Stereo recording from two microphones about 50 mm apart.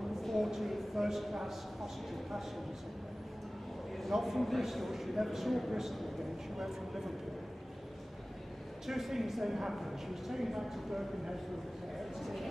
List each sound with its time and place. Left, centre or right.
0.2 s a woman's voice: centre
4.0 s a woman's voice: centre
8.8 s a woman's voice: centre